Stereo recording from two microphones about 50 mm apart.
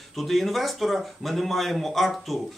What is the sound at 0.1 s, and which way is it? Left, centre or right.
Speech, centre.